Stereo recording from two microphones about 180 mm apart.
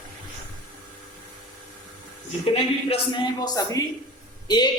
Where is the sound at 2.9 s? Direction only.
25° left (ahead or behind).